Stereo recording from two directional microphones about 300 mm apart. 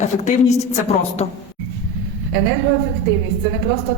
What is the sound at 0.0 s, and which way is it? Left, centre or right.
A woman's voice, left.